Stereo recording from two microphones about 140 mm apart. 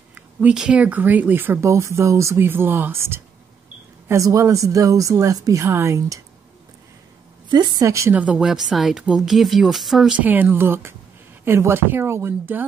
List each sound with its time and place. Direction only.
0.1 s speech: 10° right (ahead or behind)
7.4 s speech: 30° right (ahead or behind)
8.2 s speech: 5° right (ahead or behind)